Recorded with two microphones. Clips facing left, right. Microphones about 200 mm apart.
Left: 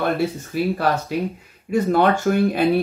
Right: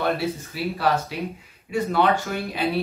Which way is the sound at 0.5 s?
50° left (ahead or behind).